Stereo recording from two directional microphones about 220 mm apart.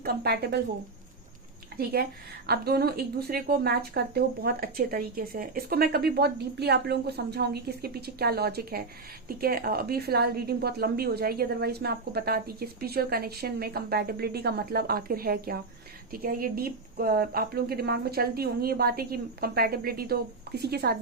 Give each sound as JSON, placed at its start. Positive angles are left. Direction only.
{"t": 0.0, "sound": "a woman's voice", "side_deg": -45}
{"t": 1.8, "sound": "a woman's voice", "side_deg": -45}